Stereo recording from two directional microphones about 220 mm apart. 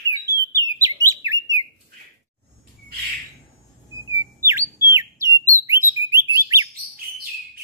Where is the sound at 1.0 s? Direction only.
15° right (ahead or behind).